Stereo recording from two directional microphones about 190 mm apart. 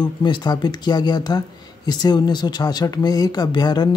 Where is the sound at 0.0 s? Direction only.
25° left (ahead or behind).